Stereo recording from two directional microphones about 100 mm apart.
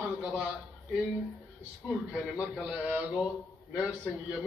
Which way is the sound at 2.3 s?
10° right (ahead or behind).